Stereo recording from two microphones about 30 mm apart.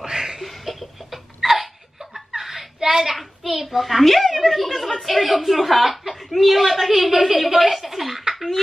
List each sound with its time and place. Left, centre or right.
0.0 s a sound: centre
0.4 s laughter: centre
3.2 s a child's voice: centre